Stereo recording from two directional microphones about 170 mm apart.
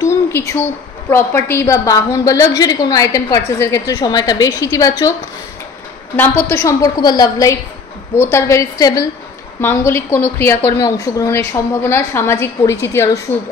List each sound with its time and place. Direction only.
0.3 s a woman's voice: 15° left (ahead or behind)
6.1 s a woman's voice: 10° left (ahead or behind)